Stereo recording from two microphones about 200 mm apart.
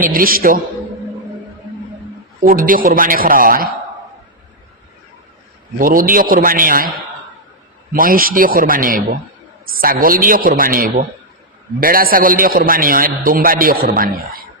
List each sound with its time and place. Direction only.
0.0 s a man's voice: 45° right (ahead or behind)
2.4 s a man's voice: 45° right (ahead or behind)
5.8 s a man's voice: 45° right (ahead or behind)
7.9 s a man's voice: 45° right (ahead or behind)